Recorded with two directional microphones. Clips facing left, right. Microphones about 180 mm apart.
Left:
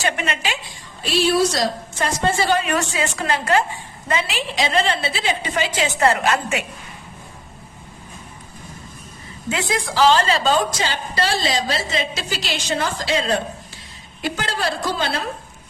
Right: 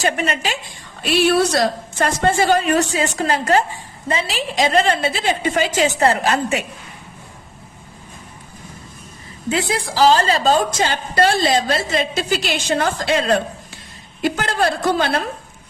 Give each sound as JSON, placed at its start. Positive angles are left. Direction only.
{"t": 0.0, "sound": "a woman's voice", "side_deg": -40}
{"t": 1.0, "sound": "a woman's voice", "side_deg": -60}
{"t": 9.5, "sound": "a woman's voice", "side_deg": -35}